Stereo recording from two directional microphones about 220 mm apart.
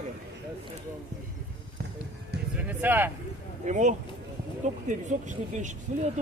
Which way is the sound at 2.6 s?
5° right (ahead or behind).